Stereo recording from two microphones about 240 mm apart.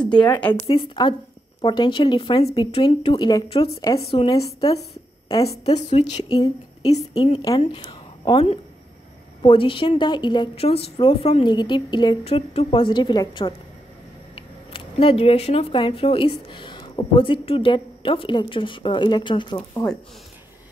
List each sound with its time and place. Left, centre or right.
0.1 s speech: centre